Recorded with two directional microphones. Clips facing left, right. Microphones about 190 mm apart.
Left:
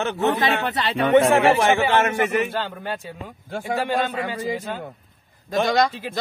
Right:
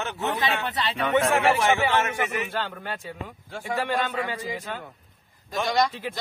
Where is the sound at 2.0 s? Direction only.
55° left (ahead or behind).